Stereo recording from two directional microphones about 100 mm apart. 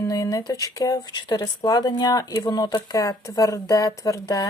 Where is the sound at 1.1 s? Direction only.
45° left (ahead or behind).